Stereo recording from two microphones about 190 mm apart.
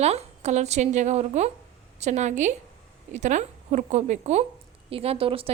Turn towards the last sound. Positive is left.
turn(degrees=-30)  # may be behind; listen again after turning